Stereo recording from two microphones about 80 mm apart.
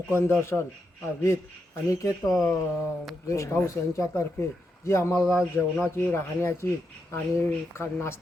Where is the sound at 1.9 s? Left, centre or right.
Left.